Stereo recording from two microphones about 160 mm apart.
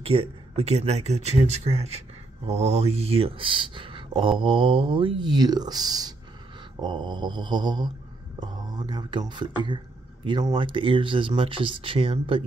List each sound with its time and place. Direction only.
0.0 s speech: 35° right (ahead or behind)